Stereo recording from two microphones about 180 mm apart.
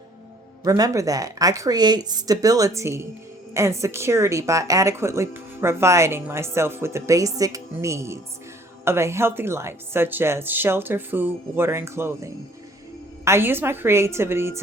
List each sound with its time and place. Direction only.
0.6 s a woman's voice: 20° right (ahead or behind)